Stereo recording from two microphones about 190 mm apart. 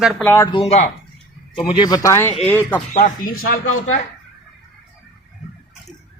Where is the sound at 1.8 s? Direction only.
20° left (ahead or behind).